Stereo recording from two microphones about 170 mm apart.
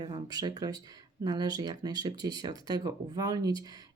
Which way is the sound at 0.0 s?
25° right (ahead or behind).